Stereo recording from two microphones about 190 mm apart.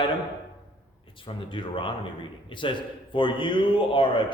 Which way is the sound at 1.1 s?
25° left (ahead or behind).